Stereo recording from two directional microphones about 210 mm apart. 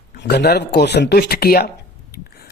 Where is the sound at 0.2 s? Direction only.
50° left (ahead or behind).